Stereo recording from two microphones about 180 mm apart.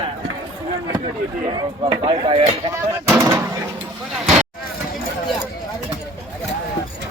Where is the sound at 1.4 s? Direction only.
25° right (ahead or behind).